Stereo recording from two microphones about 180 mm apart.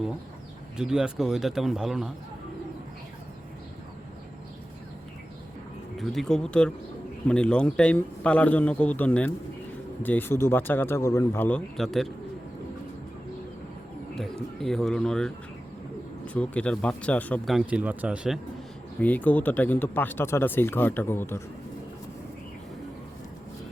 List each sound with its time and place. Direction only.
0.8 s speech: 5° right (ahead or behind)
6.0 s speech: centre (ahead or behind)
14.2 s speech: centre (ahead or behind)
18.9 s speech: 10° left (ahead or behind)